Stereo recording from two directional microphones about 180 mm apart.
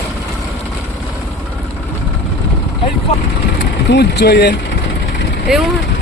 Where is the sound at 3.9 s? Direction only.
70° left (ahead or behind).